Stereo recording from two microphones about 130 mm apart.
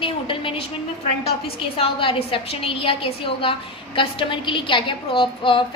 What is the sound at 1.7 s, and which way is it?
A woman's voice, 45° left (ahead or behind).